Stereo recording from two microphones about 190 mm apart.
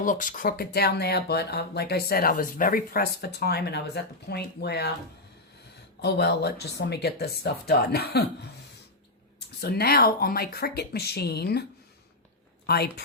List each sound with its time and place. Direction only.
0.0 s speech: 45° left (ahead or behind); by 4.9 s 60° left (ahead or behind)
6.0 s speech: 60° left (ahead or behind)
9.6 s speech: 55° left (ahead or behind)
12.6 s a woman's voice: 55° left (ahead or behind)